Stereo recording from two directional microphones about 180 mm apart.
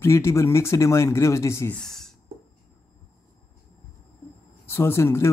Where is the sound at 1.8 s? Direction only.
Centre (ahead or behind).